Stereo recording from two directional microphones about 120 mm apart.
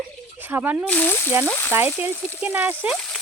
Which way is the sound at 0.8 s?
15° left (ahead or behind).